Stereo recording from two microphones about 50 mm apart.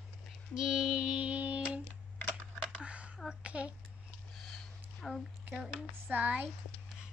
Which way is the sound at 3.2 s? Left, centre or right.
Right.